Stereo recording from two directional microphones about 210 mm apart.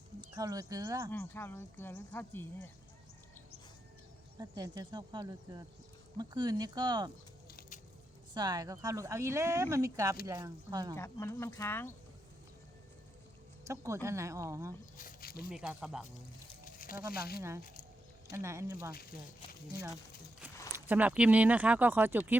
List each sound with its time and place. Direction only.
0.2 s speech: 15° right (ahead or behind)
1.1 s speech: 10° left (ahead or behind)
4.4 s speech: 20° right (ahead or behind)
8.3 s speech: 20° right (ahead or behind)
10.9 s speech: 10° left (ahead or behind)
13.7 s speech: 15° right (ahead or behind)
14.9 s a sound: 45° left (ahead or behind)
15.4 s speech: 5° right (ahead or behind)
16.6 s speech: 40° left (ahead or behind)
18.3 s speech: 15° right (ahead or behind)
20.7 s speech: 10° right (ahead or behind)